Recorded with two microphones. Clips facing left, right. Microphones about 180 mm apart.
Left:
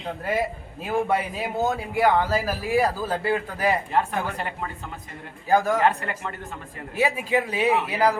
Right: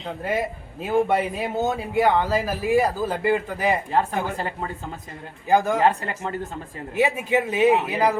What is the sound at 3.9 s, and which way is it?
Speech, 30° right (ahead or behind).